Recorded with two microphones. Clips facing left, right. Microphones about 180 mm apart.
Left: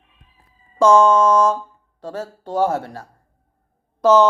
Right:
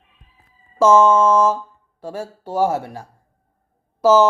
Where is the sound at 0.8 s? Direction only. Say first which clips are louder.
Even; 5° right (ahead or behind).